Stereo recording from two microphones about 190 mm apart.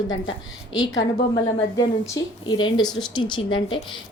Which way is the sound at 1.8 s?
20° left (ahead or behind).